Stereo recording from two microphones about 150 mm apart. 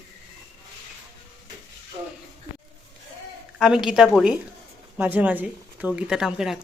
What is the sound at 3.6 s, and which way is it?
Speech, 5° right (ahead or behind).